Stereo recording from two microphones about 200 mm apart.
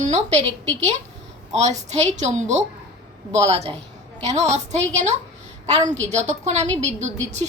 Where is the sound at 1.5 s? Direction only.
35° right (ahead or behind).